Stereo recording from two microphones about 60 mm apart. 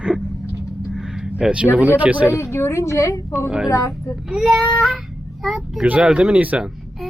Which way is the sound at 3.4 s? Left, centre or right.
Centre.